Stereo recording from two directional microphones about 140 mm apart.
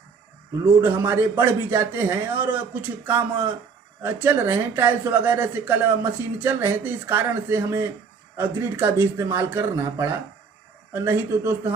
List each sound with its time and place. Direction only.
0.6 s speech: 15° right (ahead or behind)
4.0 s speech: 15° right (ahead or behind)